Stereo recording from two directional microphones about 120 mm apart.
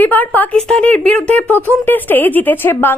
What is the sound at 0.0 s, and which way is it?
Speech, 15° left (ahead or behind).